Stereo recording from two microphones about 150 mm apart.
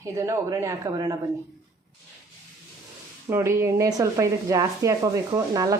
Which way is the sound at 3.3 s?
15° right (ahead or behind).